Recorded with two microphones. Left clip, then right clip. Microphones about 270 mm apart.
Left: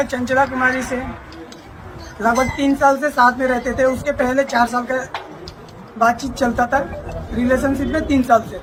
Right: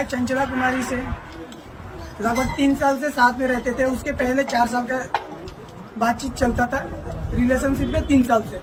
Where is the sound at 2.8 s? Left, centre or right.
Centre.